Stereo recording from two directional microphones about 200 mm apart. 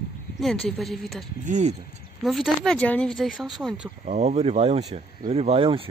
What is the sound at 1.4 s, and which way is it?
Speech, 35° right (ahead or behind).